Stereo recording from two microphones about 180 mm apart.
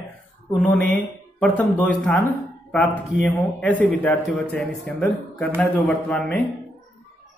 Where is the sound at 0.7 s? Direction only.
50° right (ahead or behind).